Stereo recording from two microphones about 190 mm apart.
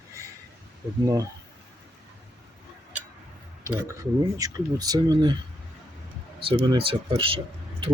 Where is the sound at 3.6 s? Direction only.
15° right (ahead or behind).